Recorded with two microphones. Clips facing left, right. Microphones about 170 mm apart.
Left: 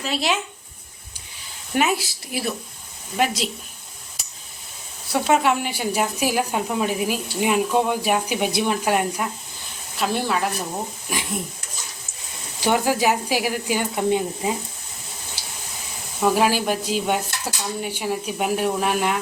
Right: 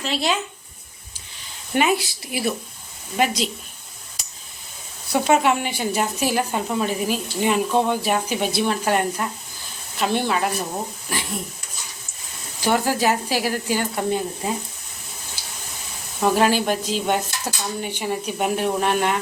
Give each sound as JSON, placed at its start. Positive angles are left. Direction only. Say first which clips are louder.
{"t": 0.0, "sound": "speech", "louder": "even", "side_deg": 0}
{"t": 1.7, "sound": "speech", "louder": "right 1 dB", "side_deg": 0}
{"t": 5.1, "sound": "speech", "louder": "right 1 dB", "side_deg": 0}
{"t": 12.7, "sound": "speech", "louder": "even", "side_deg": 10}
{"t": 16.2, "sound": "speech", "louder": "right 1 dB", "side_deg": 5}